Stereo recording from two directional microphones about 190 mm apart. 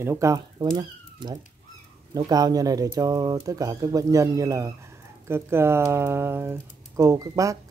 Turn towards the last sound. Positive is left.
turn(degrees=-15)  # may be behind; listen again after turning